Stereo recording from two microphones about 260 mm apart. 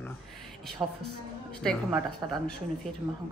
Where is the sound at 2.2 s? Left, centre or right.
Centre.